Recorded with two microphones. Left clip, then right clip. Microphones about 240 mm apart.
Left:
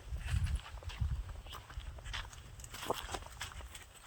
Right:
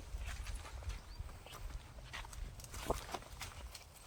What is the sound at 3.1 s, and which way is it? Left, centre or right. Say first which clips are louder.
Walk: left 2 dB; centre.